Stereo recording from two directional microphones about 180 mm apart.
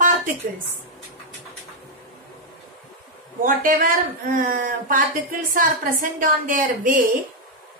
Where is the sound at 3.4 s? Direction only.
50° right (ahead or behind).